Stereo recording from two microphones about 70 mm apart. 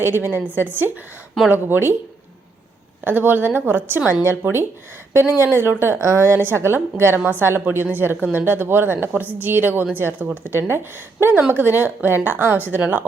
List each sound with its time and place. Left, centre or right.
0.0 s a woman's voice: right
3.0 s a woman's voice: right
6.0 s a woman's voice: right